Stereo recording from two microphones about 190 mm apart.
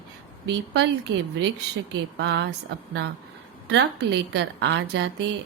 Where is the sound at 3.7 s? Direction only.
65° right (ahead or behind).